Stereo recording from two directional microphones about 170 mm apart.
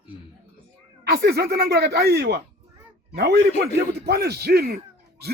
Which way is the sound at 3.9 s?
70° right (ahead or behind).